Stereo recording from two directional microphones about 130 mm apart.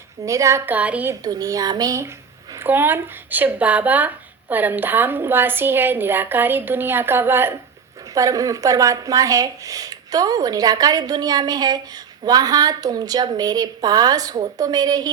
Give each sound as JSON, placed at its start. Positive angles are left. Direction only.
{"t": 0.3, "sound": "speech", "side_deg": -25}
{"t": 1.2, "sound": "speech", "side_deg": -30}
{"t": 2.6, "sound": "speech", "side_deg": -15}